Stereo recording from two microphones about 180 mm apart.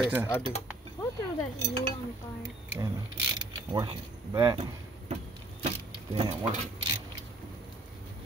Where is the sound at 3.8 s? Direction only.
25° right (ahead or behind).